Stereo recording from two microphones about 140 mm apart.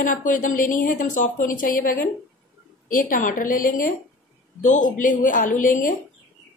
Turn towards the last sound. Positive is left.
turn(degrees=70)  # may be behind; listen again after turning